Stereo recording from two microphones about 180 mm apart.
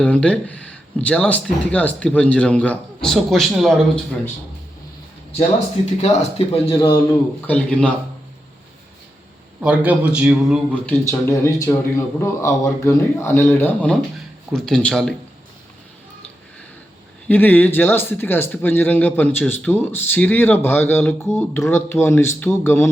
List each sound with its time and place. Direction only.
0.0 s speech: 5° left (ahead or behind)
6.0 s speech: 35° left (ahead or behind)
7.4 s speech: 10° left (ahead or behind)
9.6 s a man's voice: 10° right (ahead or behind)
10.8 s speech: 15° left (ahead or behind)
17.2 s speech: 10° left (ahead or behind)